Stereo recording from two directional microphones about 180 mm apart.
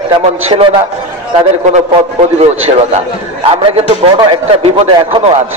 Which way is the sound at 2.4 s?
35° right (ahead or behind).